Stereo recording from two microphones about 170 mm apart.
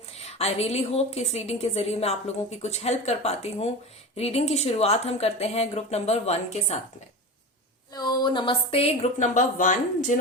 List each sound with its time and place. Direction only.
0.2 s a woman's voice: 40° left (ahead or behind)
7.9 s a woman's voice: 25° left (ahead or behind); by 10.2 s 50° left (ahead or behind)